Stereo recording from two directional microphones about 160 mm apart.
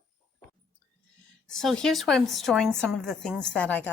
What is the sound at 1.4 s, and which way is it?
A woman's voice, 5° left (ahead or behind).